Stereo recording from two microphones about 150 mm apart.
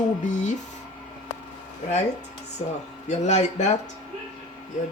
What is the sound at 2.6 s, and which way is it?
Speech, 45° left (ahead or behind).